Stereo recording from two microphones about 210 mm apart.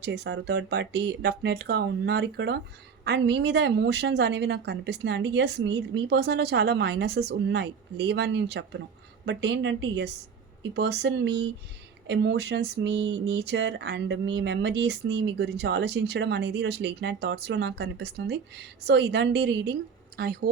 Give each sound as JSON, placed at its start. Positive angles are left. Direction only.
{"t": 0.0, "sound": "a woman's voice", "side_deg": -55}